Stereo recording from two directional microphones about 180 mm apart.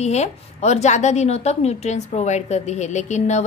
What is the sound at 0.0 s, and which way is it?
A woman's voice, 40° left (ahead or behind).